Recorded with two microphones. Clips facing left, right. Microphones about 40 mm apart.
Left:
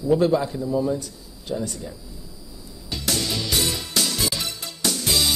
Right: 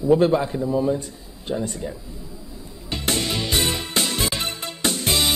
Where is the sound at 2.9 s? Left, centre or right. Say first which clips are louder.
Right 2 dB; right.